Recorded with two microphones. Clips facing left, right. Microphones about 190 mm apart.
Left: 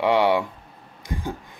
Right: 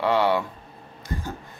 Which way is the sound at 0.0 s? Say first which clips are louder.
Left 2 dB; 15° left (ahead or behind).